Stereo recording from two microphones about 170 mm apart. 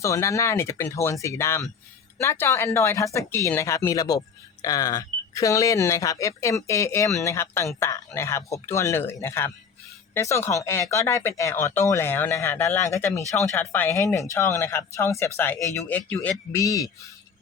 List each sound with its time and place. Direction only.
0.0 s speech: 20° left (ahead or behind)
16.5 s a man's voice: 20° left (ahead or behind)